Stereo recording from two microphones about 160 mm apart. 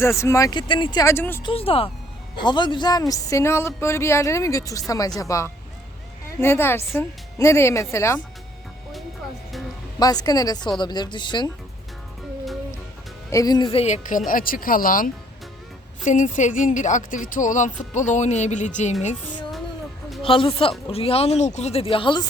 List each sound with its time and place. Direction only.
0.0 s speech: 15° left (ahead or behind)
1.0 s speech: 15° left (ahead or behind)
1.5 s speech: 35° left (ahead or behind); by 8.2 s 15° left (ahead or behind)
10.0 s speech: 25° left (ahead or behind)
13.3 s speech: 25° left (ahead or behind); by 14.2 s 50° left (ahead or behind)
14.3 s speech: 60° left (ahead or behind)
16.0 s speech: 50° left (ahead or behind)
20.2 s speech: 35° left (ahead or behind)